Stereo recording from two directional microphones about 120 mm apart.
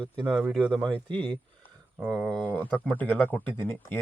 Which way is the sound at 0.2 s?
40° right (ahead or behind).